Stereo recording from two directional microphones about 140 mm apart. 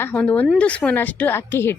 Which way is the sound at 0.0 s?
15° left (ahead or behind).